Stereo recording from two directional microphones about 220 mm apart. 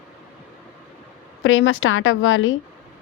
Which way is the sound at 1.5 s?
60° left (ahead or behind).